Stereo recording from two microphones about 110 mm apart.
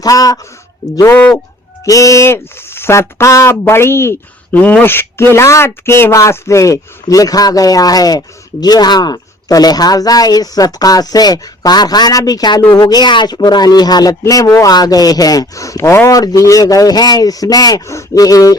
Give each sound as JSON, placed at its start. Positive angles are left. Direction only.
{"t": 0.0, "sound": "speech", "side_deg": 35}
{"t": 1.1, "sound": "speech", "side_deg": 15}
{"t": 1.8, "sound": "speech", "side_deg": 30}